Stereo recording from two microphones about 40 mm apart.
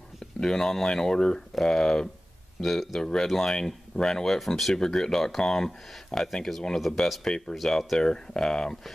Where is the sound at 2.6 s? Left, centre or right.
Centre.